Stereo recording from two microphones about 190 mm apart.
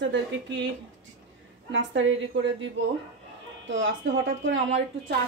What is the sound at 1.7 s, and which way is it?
A woman's voice, 85° right.